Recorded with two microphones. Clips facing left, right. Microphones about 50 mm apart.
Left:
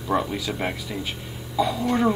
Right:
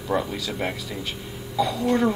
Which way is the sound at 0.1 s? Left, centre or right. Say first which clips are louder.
Left 1 dB; centre.